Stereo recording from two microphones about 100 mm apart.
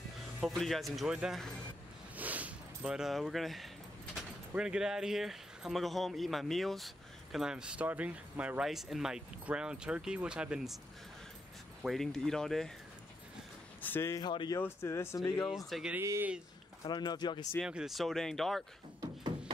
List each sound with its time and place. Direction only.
0.6 s speech: centre (ahead or behind)
8.6 s speech: centre (ahead or behind)
11.8 s speech: centre (ahead or behind)
13.7 s a sound: 20° left (ahead or behind)
14.1 s speech: 50° left (ahead or behind)
14.6 s speech: 25° left (ahead or behind)
15.4 s speech: centre (ahead or behind)
16.0 s speech: 25° right (ahead or behind)
16.8 s speech: 45° left (ahead or behind)
17.6 s speech: 5° right (ahead or behind)